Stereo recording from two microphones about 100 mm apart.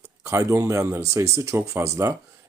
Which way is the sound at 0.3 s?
30° right (ahead or behind).